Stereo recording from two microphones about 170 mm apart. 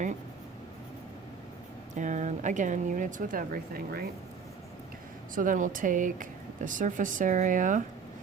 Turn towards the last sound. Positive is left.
turn(degrees=-50)  # may be behind; listen again after turning